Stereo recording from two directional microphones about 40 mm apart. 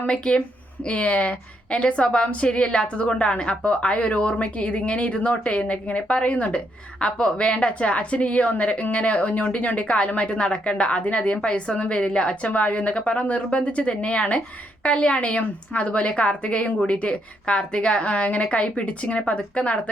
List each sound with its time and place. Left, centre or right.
0.9 s a woman's voice: left